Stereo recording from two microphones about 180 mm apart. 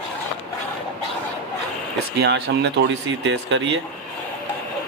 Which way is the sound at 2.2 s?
70° right (ahead or behind).